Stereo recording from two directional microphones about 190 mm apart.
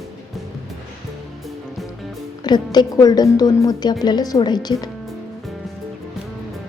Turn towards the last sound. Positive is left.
turn(degrees=20)  # may be behind; listen again after turning